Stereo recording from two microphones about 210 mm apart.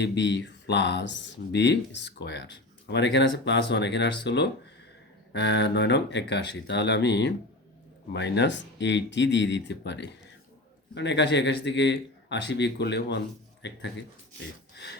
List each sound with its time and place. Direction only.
0.0 s speech: 55° left (ahead or behind)